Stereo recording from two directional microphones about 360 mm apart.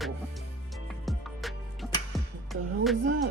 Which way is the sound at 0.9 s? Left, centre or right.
Centre.